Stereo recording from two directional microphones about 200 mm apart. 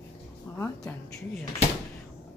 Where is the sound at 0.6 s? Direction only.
15° left (ahead or behind).